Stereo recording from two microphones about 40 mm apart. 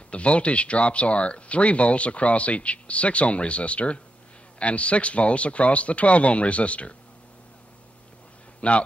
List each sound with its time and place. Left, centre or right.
0.1 s speech: left
8.5 s speech: left